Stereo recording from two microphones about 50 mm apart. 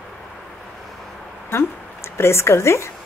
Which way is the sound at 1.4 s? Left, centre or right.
Left.